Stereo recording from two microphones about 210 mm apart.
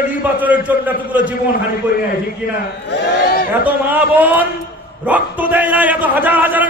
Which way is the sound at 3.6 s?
10° right (ahead or behind).